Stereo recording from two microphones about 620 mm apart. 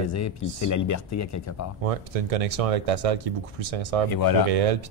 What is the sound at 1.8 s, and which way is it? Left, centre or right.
Speech, right.